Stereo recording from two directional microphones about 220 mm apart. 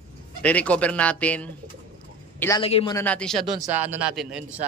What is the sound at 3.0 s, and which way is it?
Speech, 5° left (ahead or behind).